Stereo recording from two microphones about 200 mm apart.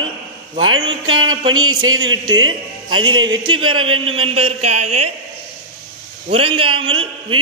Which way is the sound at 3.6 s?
90° right.